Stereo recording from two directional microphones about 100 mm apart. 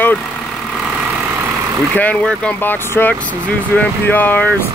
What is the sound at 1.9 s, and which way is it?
Speech, 15° left (ahead or behind).